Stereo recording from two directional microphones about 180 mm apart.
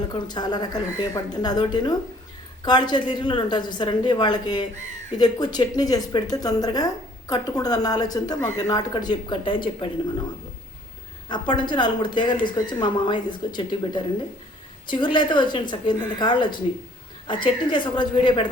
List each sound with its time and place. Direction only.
0.1 s speech: 25° left (ahead or behind)
11.3 s speech: 25° left (ahead or behind)